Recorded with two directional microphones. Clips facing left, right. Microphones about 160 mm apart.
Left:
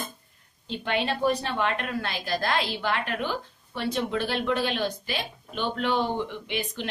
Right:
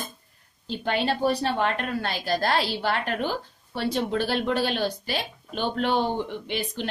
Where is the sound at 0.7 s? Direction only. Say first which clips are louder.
Right 2 dB; 35° right (ahead or behind).